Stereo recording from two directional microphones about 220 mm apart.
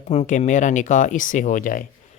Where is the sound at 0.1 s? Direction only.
30° left (ahead or behind).